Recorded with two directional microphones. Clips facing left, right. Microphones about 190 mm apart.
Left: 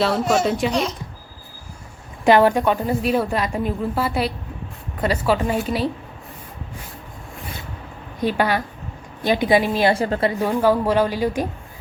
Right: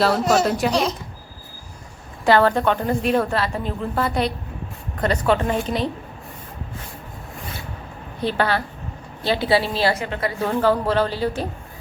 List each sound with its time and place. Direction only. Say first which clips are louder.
0.4 s a woman's voice: even; centre (ahead or behind)
2.2 s a woman's voice: left 2 dB; 15° left (ahead or behind)
8.2 s a woman's voice: left 1 dB; 10° left (ahead or behind)
9.9 s a woman's voice: left 5 dB; 30° left (ahead or behind)
10.3 s a woman's voice: right 2 dB; 15° left (ahead or behind)